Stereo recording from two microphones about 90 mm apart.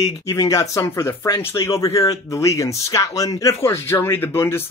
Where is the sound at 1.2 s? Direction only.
45° left (ahead or behind).